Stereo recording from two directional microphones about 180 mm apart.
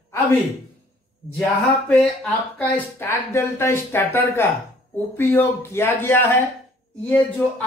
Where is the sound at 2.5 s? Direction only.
10° left (ahead or behind).